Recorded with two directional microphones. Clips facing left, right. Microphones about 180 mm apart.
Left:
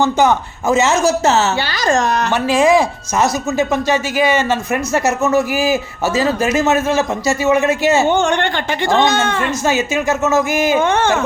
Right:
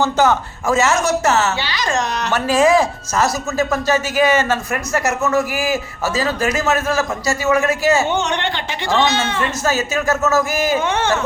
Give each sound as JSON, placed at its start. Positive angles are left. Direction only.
{"t": 0.0, "sound": "a man's voice", "side_deg": 15}
{"t": 1.6, "sound": "speech", "side_deg": 45}
{"t": 2.3, "sound": "speech", "side_deg": 10}
{"t": 5.0, "sound": "a man's voice", "side_deg": 25}
{"t": 8.1, "sound": "speech", "side_deg": 50}
{"t": 9.6, "sound": "speech", "side_deg": 15}
{"t": 10.8, "sound": "speech", "side_deg": 50}